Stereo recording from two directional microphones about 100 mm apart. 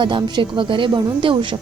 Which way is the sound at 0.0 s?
50° right (ahead or behind).